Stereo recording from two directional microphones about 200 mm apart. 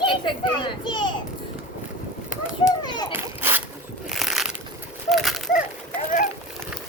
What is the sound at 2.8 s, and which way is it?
Children playing, 20° left (ahead or behind).